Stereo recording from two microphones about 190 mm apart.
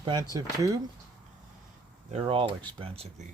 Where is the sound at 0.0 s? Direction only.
20° right (ahead or behind).